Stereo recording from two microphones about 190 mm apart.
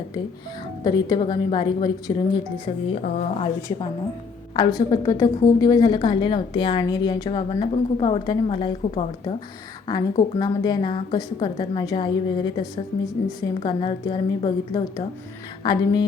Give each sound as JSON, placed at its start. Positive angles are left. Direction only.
{"t": 0.9, "sound": "a woman's voice", "side_deg": 20}
{"t": 2.9, "sound": "a woman's voice", "side_deg": 40}